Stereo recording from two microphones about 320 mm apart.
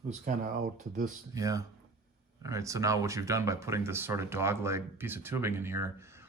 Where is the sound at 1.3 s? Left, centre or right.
Centre.